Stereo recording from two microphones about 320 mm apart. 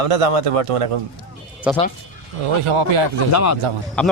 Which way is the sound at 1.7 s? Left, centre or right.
Centre.